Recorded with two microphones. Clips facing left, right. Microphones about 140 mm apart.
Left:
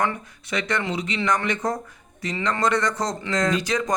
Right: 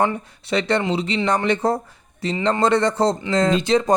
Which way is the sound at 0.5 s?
30° right (ahead or behind).